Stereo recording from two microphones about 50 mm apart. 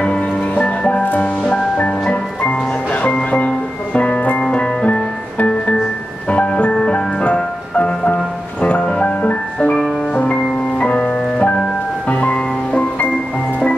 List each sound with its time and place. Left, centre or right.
0.0 s music: left
6.3 s music: left